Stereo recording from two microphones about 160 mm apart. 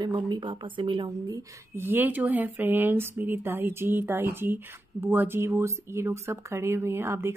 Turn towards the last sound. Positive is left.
turn(degrees=-15)  # may be behind; listen again after turning